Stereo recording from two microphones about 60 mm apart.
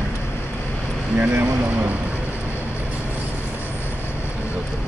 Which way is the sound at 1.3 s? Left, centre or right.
Right.